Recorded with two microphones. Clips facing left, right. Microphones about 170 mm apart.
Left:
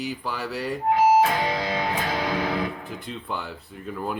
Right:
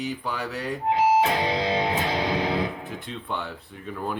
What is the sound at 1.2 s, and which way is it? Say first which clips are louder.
Music: left 1 dB; 20° right (ahead or behind).